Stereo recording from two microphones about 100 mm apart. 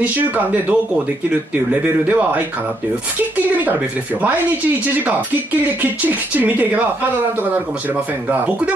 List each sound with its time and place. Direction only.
0.0 s speech: 20° right (ahead or behind)
5.8 s speech: 15° right (ahead or behind)
8.3 s speech: 15° right (ahead or behind)